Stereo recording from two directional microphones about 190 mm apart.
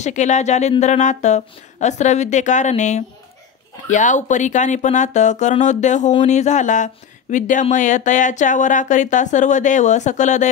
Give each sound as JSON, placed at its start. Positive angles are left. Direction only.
{"t": 0.0, "sound": "speech", "side_deg": 40}